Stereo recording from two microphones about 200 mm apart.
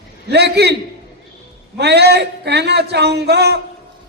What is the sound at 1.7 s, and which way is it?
A man's voice, 55° right (ahead or behind).